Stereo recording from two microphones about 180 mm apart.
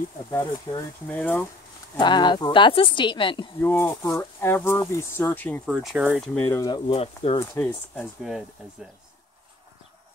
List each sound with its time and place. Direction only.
0.7 s speech: 30° left (ahead or behind)
1.0 s speech: 10° left (ahead or behind)
2.0 s speech: 25° left (ahead or behind)
3.6 s speech: 15° left (ahead or behind); by 6.3 s 5° right (ahead or behind)
6.3 s speech: 15° left (ahead or behind); by 7.3 s 35° left (ahead or behind)
7.3 s speech: 10° left (ahead or behind)
8.2 s speech: 5° right (ahead or behind)